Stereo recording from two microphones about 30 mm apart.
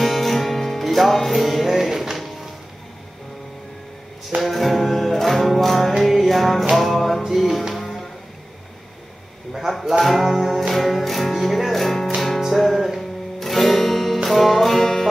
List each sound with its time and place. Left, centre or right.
0.0 s music: centre
4.4 s music: centre
7.2 s speech: centre
7.7 s music: centre
10.0 s speech: centre
12.5 s music: centre